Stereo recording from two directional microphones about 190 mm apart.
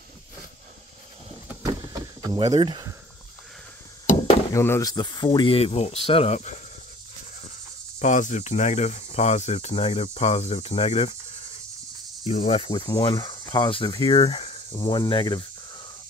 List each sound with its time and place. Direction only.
1.5 s vehicle: 15° right (ahead or behind)
2.5 s speech: 25° right (ahead or behind)
4.6 s cricket: 15° left (ahead or behind); by 5.9 s 35° left (ahead or behind)
6.0 s speech: 30° left (ahead or behind)
8.0 s speech: 40° left (ahead or behind)
12.3 s cricket: 30° left (ahead or behind)